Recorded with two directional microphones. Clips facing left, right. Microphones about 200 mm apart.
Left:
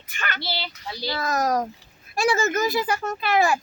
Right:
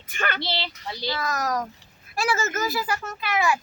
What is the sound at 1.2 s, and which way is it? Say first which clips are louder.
A child's voice: left 6 dB; 25° left (ahead or behind).